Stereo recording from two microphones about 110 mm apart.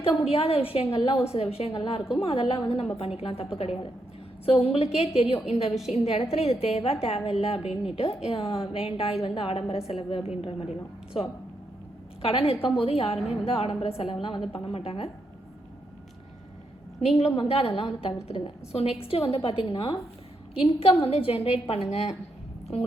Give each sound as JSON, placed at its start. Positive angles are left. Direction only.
{"t": 0.2, "sound": "a woman's voice", "side_deg": 60}
{"t": 17.0, "sound": "a woman's voice", "side_deg": 70}